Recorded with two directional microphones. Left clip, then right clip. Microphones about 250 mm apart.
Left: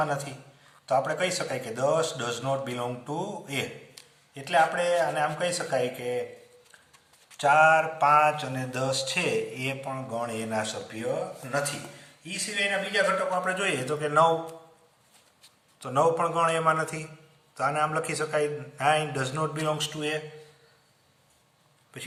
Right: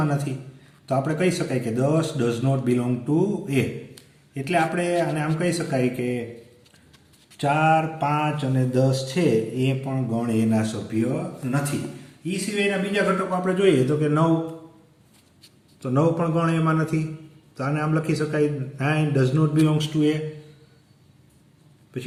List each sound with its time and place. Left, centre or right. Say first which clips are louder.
0.0 s mantra: right 1 dB; centre
4.4 s speech: right 1 dB; centre
7.3 s mantra: even; centre
13.4 s a man's voice: right 8 dB; centre
15.8 s a man's voice: right 1 dB; left